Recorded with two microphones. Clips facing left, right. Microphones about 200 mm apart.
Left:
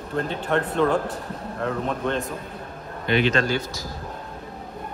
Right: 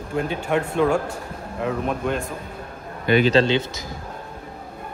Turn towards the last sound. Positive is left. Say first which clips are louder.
# right 5 dB
turn(degrees=-30)  # may be behind; listen again after turning